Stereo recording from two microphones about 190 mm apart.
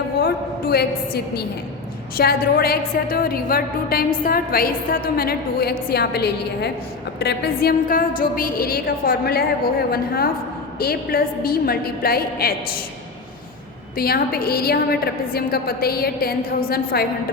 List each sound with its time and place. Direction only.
0.2 s a woman's voice: 55° left (ahead or behind)
10.8 s a woman's voice: 50° left (ahead or behind)
13.9 s a woman's voice: 50° left (ahead or behind)